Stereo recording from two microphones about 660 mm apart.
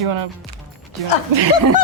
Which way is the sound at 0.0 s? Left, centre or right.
Right.